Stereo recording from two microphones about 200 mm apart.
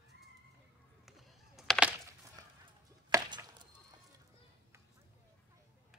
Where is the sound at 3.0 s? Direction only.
20° right (ahead or behind).